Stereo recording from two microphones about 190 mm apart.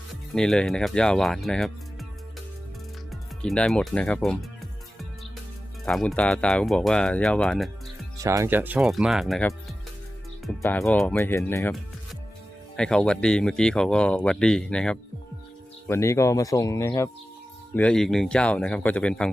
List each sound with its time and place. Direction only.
0.3 s speech: 5° left (ahead or behind)
3.1 s speech: centre (ahead or behind)
5.8 s speech: centre (ahead or behind)
8.2 s speech: 15° right (ahead or behind); by 9.5 s centre (ahead or behind)
10.8 s speech: 5° left (ahead or behind)
12.7 s speech: 5° left (ahead or behind)
17.7 s speech: 5° left (ahead or behind)